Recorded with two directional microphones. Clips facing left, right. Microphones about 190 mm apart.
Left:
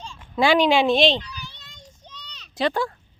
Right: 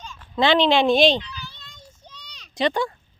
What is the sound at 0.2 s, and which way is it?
Speech, 10° left (ahead or behind).